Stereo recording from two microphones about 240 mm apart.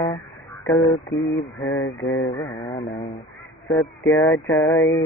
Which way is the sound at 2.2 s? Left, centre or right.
Centre.